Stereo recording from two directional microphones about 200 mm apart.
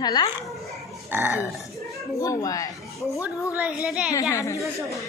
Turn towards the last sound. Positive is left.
turn(degrees=15)  # may be behind; listen again after turning